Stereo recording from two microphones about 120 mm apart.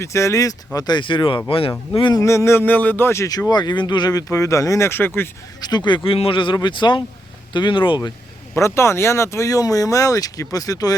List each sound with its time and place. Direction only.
0.0 s speech: 25° left (ahead or behind); by 1.7 s 50° left (ahead or behind)
1.9 s speech: 40° left (ahead or behind)
2.2 s speech: 25° left (ahead or behind)
5.5 s speech: 35° left (ahead or behind)
8.5 s speech: 25° left (ahead or behind)